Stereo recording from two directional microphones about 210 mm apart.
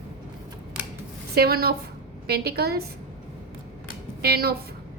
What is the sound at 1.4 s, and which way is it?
Speech, 45° right (ahead or behind).